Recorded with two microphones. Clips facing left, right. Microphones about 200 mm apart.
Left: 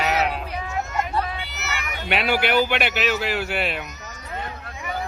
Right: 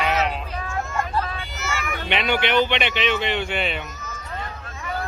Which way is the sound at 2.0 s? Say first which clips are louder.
Left 1 dB; 5° left (ahead or behind).